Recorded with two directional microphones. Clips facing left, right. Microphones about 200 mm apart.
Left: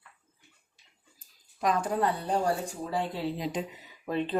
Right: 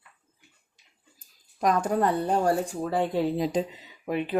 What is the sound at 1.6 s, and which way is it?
Speech, 45° right (ahead or behind).